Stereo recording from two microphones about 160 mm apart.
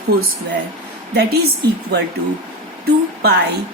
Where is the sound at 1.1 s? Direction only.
90° right.